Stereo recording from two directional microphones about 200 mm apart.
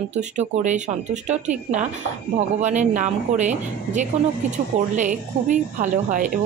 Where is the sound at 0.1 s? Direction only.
35° right (ahead or behind).